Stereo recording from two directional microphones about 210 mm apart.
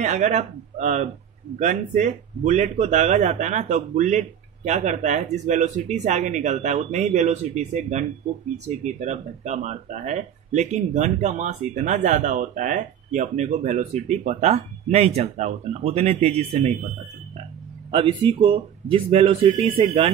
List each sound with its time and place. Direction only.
0.0 s speech: 35° right (ahead or behind)
17.9 s speech: 25° right (ahead or behind)